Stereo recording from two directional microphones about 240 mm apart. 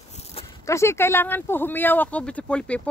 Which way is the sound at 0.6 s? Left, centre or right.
Centre.